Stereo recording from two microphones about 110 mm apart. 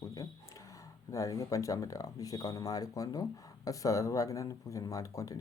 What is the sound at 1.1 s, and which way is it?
Speech, 30° left (ahead or behind).